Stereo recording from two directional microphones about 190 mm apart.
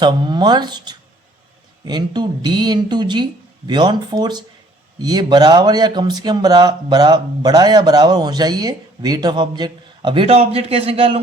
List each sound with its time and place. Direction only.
0.0 s speech: 25° right (ahead or behind)